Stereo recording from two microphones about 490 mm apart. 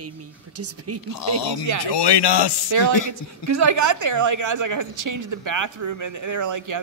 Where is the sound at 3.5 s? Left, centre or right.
Right.